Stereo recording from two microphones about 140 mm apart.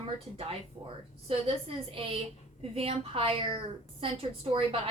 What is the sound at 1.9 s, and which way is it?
A woman's voice, 40° right (ahead or behind).